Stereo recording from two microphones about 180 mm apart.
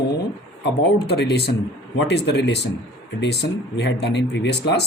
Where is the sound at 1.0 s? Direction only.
65° left (ahead or behind).